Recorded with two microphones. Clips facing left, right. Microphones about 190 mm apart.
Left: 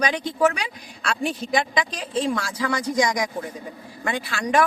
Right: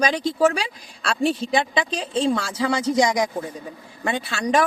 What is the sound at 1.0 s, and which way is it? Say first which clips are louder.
A woman's voice: right 4 dB; 30° right (ahead or behind).